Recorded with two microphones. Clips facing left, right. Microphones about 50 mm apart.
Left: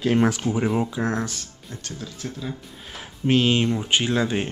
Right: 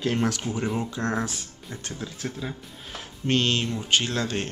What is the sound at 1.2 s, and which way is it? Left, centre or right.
Speech, centre.